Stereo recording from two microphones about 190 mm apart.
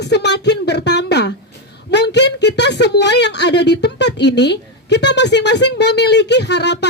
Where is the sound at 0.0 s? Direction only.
60° left (ahead or behind).